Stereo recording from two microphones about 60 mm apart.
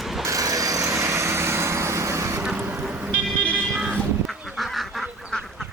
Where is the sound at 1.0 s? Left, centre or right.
Right.